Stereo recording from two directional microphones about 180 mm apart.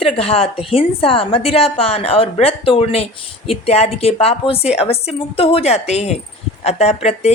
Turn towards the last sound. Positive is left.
turn(degrees=35)  # may be behind; listen again after turning